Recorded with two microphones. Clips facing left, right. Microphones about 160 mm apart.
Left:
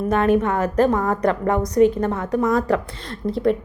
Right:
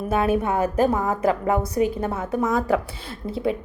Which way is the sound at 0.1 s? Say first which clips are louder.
Left 3 dB; 10° right (ahead or behind).